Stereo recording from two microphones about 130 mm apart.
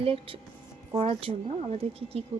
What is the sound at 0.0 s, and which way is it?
Speech, 45° right (ahead or behind).